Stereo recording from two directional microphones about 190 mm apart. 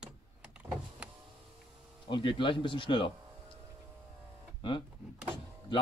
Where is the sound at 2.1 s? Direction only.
25° left (ahead or behind).